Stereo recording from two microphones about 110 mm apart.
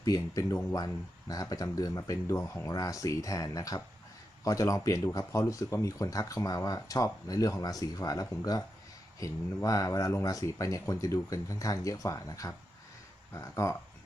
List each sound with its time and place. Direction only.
0.0 s speech: 30° left (ahead or behind)